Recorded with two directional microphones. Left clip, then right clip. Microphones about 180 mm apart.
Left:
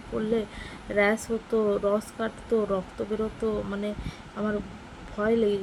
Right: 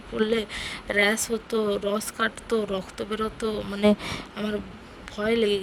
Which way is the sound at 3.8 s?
65° right (ahead or behind).